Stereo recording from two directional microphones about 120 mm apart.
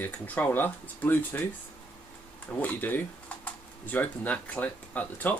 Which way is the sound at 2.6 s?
15° left (ahead or behind).